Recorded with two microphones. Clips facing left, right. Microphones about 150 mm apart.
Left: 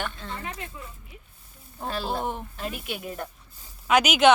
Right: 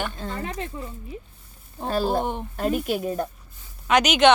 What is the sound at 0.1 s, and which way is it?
Speech, 40° right (ahead or behind).